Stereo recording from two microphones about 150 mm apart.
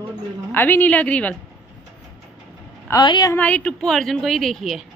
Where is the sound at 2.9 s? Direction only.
25° left (ahead or behind).